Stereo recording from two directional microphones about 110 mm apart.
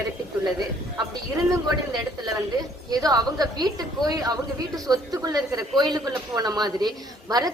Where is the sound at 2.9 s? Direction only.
35° right (ahead or behind).